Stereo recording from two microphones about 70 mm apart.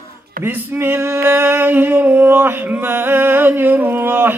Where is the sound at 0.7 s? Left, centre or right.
Right.